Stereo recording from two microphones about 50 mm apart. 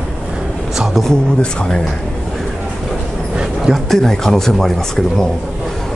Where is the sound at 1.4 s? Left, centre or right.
Centre.